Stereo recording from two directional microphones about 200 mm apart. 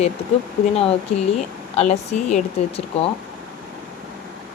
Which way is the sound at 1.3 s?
35° left (ahead or behind).